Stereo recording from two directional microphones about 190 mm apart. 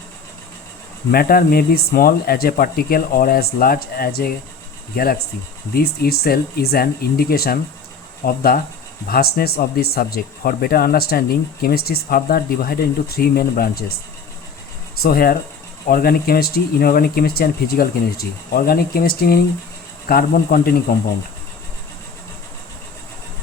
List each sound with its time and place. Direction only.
1.1 s speech: 50° left (ahead or behind)
15.0 s speech: 50° left (ahead or behind)